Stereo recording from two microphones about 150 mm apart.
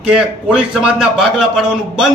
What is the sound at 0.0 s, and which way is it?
A man's voice, 5° right (ahead or behind).